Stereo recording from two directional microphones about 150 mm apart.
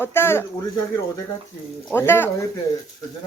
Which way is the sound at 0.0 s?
15° left (ahead or behind).